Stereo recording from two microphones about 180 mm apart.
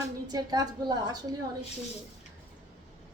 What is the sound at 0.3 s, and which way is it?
A woman's voice, 20° right (ahead or behind).